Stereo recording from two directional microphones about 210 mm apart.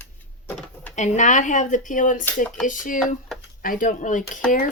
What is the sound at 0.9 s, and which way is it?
Speech, 35° left (ahead or behind).